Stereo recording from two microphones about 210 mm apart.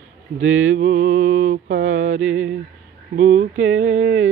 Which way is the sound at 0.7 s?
40° right (ahead or behind).